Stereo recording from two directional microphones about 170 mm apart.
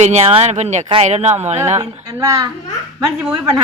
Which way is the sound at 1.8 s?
20° right (ahead or behind).